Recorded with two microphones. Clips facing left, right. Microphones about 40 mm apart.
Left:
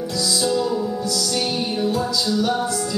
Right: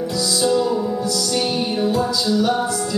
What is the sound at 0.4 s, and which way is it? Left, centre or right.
Music, centre.